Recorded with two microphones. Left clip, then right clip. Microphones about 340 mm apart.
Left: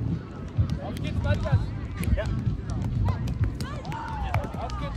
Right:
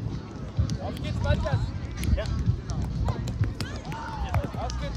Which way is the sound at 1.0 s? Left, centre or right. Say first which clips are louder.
Right 2 dB; right.